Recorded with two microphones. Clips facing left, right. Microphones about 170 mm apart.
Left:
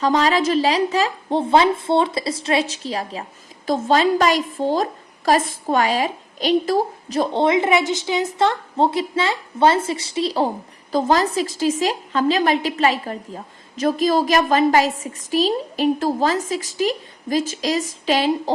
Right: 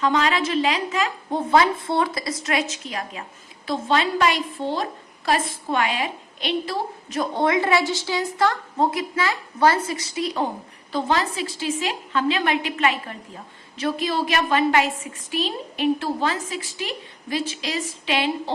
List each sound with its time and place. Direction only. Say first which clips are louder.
0.0 s a woman's voice: left 4 dB; 35° left (ahead or behind)